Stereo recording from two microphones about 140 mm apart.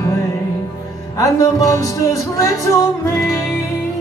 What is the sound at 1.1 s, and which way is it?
Music, 25° left (ahead or behind).